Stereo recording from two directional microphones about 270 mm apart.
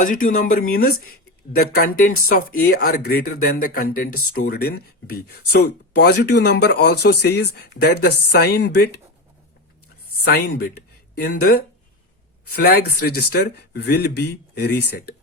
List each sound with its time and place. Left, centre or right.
0.0 s speech: left
10.2 s speech: left